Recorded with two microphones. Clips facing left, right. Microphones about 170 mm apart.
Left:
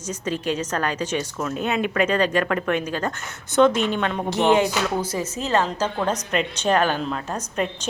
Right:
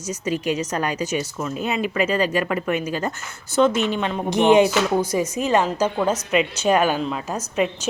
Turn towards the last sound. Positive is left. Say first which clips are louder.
# right 4 dB
turn(degrees=-5)  # may be behind; listen again after turning